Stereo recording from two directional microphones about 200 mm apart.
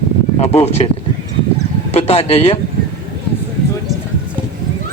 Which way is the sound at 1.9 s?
30° left (ahead or behind).